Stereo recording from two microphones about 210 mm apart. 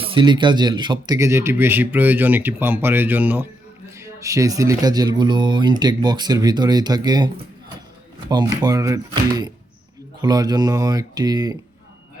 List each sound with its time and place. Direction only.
0.0 s speech: 25° right (ahead or behind)
8.3 s speech: 20° right (ahead or behind)